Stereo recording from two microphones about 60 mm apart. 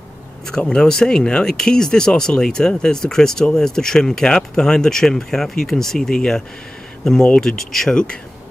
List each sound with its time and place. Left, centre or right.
0.5 s speech: centre